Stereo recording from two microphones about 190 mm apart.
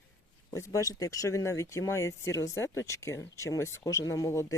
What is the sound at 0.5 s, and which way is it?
Speech, 15° left (ahead or behind).